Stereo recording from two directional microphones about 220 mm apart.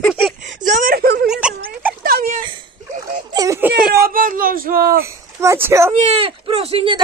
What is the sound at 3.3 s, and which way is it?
Baby cry, 15° right (ahead or behind).